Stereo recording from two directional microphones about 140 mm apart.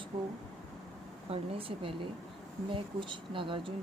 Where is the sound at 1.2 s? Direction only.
45° right (ahead or behind).